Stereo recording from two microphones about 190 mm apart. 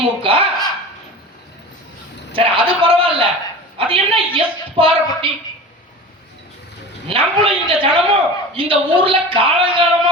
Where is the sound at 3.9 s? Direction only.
30° right (ahead or behind).